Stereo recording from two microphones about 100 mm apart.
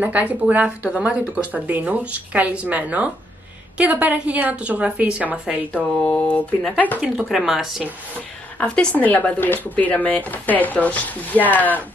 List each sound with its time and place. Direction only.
0.0 s speech: 15° right (ahead or behind)
5.7 s speech: 15° left (ahead or behind)
7.0 s speech: centre (ahead or behind)
8.5 s speech: 15° left (ahead or behind)